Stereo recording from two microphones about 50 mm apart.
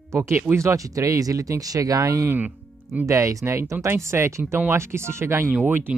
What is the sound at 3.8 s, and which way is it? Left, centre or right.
Speech, right.